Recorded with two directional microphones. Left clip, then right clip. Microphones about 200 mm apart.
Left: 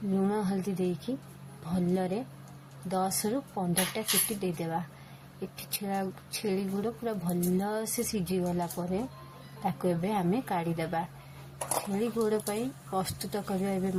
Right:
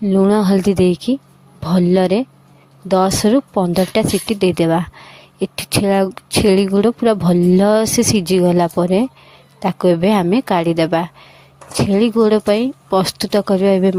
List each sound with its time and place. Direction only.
0.2 s a woman's voice: 50° right (ahead or behind)